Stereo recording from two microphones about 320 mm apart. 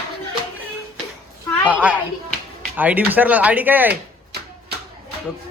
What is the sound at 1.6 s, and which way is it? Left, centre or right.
Speech, centre.